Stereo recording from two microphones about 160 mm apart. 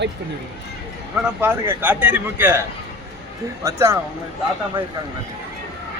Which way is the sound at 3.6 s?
20° right (ahead or behind).